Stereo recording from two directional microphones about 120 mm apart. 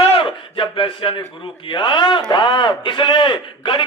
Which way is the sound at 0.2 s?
45° left (ahead or behind).